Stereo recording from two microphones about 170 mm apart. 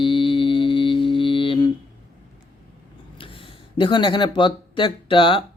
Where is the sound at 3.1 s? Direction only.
30° left (ahead or behind).